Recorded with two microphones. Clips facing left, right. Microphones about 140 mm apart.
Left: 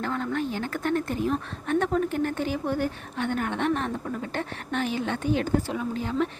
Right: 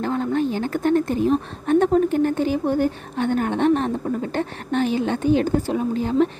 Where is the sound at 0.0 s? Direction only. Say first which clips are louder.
Right 7 dB; 25° right (ahead or behind).